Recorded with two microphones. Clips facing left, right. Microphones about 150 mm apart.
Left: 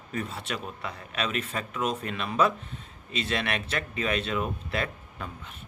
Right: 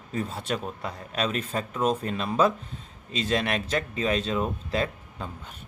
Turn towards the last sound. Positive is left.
turn(degrees=-30)  # may be behind; listen again after turning